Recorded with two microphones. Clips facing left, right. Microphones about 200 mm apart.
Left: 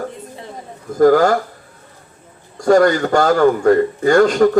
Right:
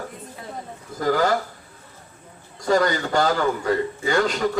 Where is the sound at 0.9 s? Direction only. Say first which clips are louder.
Left 9 dB; 50° left (ahead or behind).